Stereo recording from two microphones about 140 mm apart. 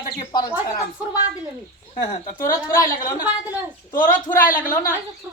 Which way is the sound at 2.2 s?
80° left.